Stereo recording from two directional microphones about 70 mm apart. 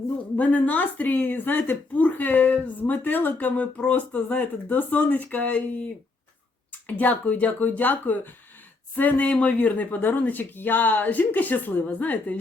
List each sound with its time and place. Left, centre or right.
0.3 s a woman's voice: left
7.0 s a woman's voice: left